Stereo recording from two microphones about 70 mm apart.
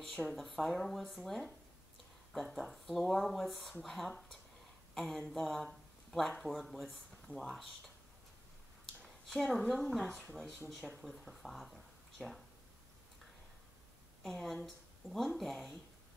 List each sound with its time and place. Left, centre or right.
0.1 s speech: centre
0.4 s speech: centre
9.0 s speech: centre
14.2 s speech: centre